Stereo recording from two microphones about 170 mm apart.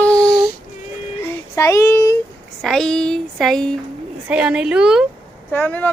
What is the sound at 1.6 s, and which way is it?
Speech, 15° left (ahead or behind).